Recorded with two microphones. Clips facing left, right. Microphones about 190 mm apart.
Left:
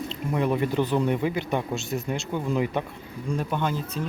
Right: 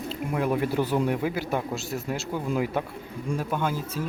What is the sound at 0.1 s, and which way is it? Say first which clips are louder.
Speech: even; 5° right (ahead or behind).